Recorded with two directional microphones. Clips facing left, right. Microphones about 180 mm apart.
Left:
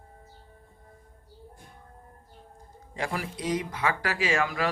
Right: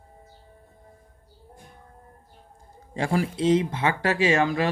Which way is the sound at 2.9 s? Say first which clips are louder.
Right 7 dB; 30° right (ahead or behind).